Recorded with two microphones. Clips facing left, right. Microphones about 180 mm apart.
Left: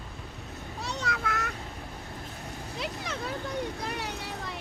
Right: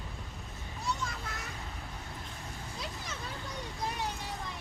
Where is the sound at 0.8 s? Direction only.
75° left (ahead or behind).